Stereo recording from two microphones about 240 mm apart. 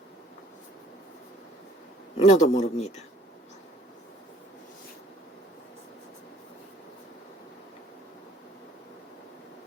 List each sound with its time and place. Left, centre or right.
2.1 s a man's voice: left